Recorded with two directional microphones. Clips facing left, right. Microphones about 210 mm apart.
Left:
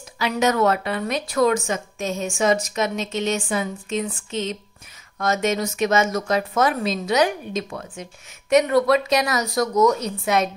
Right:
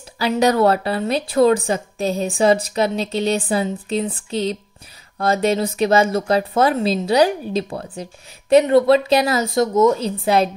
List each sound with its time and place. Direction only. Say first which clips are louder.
0.2 s speech: right 4 dB; 35° right (ahead or behind)